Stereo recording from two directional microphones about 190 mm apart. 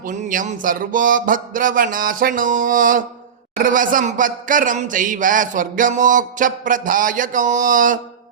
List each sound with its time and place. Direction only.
0.0 s speech: 45° right (ahead or behind)